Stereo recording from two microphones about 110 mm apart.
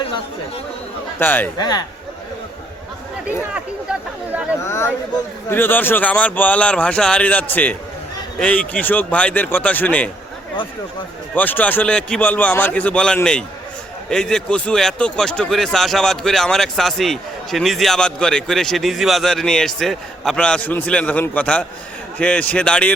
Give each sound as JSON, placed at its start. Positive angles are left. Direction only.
{"t": 0.0, "sound": "speech", "side_deg": 55}
{"t": 1.2, "sound": "speech", "side_deg": 15}
{"t": 1.5, "sound": "speech", "side_deg": 40}
{"t": 3.2, "sound": "a sound", "side_deg": -10}
{"t": 4.6, "sound": "speech", "side_deg": 20}
{"t": 11.3, "sound": "speech", "side_deg": 15}